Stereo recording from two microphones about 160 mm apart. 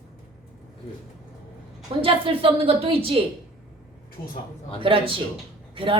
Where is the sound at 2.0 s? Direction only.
35° right (ahead or behind).